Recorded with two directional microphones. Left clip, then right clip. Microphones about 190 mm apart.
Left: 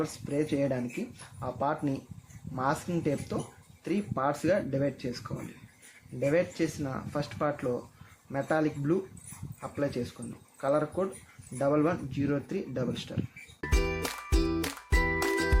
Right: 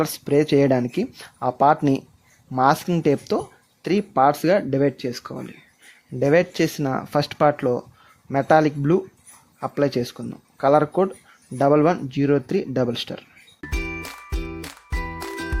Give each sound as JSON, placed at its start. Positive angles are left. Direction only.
{"t": 0.0, "sound": "speech", "side_deg": -60}
{"t": 13.6, "sound": "music", "side_deg": 5}